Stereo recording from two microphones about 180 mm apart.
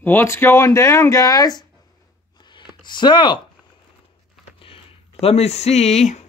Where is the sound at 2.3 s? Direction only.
25° left (ahead or behind).